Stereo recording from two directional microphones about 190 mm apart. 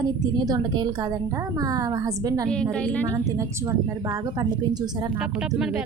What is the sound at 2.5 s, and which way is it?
Speech, 5° left (ahead or behind).